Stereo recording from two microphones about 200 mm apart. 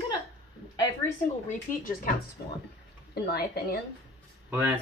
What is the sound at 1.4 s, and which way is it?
Speech, 45° left (ahead or behind).